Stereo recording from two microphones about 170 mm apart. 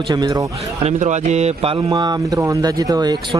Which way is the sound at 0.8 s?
45° right (ahead or behind).